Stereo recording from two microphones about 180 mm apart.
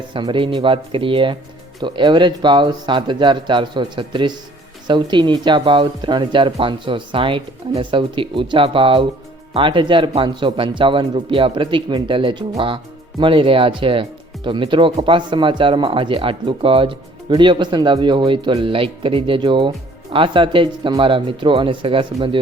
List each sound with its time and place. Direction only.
0.1 s speech: 25° right (ahead or behind)